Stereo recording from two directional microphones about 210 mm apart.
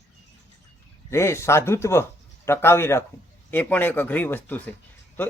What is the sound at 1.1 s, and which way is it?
Speech, 15° left (ahead or behind).